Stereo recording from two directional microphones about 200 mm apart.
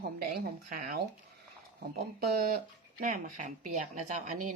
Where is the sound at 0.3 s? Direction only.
45° right (ahead or behind).